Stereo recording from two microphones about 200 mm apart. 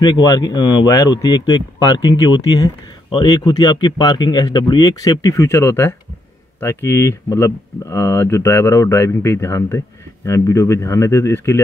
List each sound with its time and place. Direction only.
0.0 s speech: 20° left (ahead or behind)